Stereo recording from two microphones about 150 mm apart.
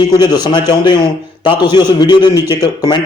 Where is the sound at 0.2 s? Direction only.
30° left (ahead or behind).